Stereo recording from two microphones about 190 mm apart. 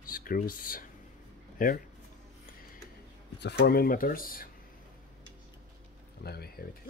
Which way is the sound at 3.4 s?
60° left (ahead or behind).